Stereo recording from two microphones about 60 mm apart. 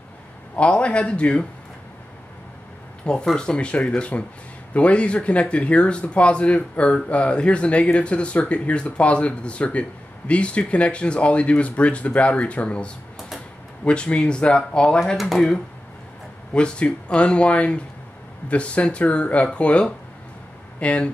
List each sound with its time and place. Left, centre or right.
0.6 s speech: centre
3.3 s speech: centre
15.1 s speech: centre
16.5 s speech: centre